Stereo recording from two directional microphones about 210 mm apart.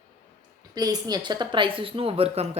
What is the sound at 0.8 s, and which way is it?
A woman's voice, 20° right (ahead or behind).